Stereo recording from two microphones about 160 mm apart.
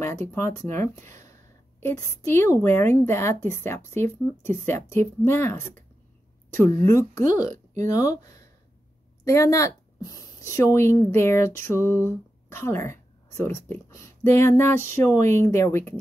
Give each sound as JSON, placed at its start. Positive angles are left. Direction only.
{"t": 0.3, "sound": "a woman's voice", "side_deg": 15}